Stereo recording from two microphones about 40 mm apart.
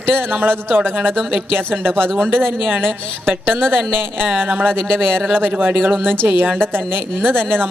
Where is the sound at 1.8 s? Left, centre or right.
Right.